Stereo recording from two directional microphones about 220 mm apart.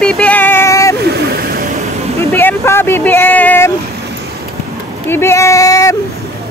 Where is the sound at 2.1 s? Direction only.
10° left (ahead or behind).